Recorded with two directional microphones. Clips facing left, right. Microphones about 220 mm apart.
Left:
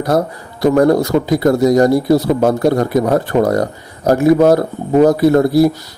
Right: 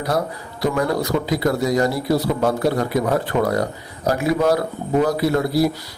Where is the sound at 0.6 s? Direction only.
50° left (ahead or behind).